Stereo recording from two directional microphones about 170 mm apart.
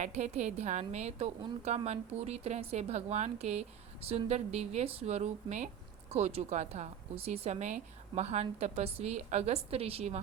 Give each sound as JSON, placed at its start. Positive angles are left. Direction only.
{"t": 0.0, "sound": "a woman's voice", "side_deg": -45}